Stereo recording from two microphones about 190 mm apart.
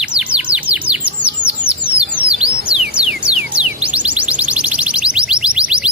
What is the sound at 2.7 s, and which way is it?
Music, 5° right (ahead or behind).